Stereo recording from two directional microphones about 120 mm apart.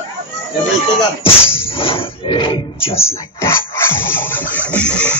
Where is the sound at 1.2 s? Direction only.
50° left (ahead or behind).